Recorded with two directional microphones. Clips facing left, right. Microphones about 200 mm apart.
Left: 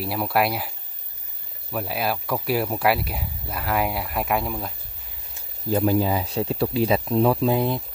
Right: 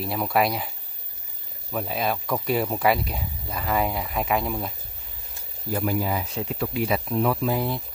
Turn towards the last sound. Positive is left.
turn(degrees=20)  # may be behind; listen again after turning